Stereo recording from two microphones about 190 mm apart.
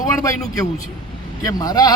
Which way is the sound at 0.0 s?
15° left (ahead or behind).